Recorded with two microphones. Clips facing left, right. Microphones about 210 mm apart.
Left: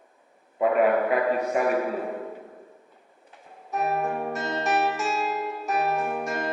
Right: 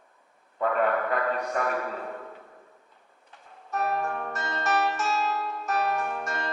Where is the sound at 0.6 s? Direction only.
10° left (ahead or behind).